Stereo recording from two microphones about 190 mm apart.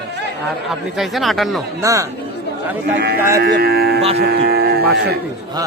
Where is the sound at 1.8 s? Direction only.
15° right (ahead or behind).